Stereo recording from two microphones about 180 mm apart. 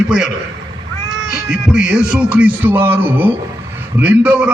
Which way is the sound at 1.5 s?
5° right (ahead or behind).